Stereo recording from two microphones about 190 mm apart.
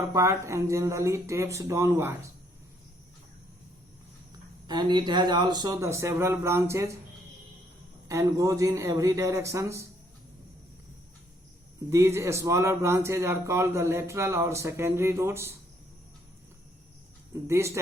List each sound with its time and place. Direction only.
0.0 s speech: 15° right (ahead or behind)
4.6 s speech: 20° right (ahead or behind)
8.0 s speech: 15° right (ahead or behind)
11.9 s speech: 15° right (ahead or behind)
17.5 s speech: 15° right (ahead or behind)